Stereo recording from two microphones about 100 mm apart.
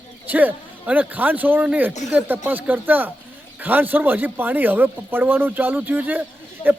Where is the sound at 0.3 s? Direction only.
15° right (ahead or behind).